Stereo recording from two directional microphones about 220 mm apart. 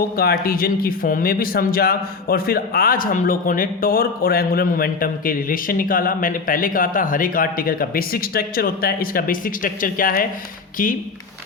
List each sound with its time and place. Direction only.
0.2 s speech: 40° left (ahead or behind)